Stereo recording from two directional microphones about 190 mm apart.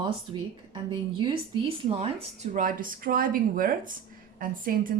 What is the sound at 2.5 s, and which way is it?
Speech, 45° right (ahead or behind).